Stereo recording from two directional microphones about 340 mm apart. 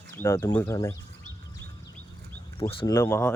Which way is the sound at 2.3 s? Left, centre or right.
Centre.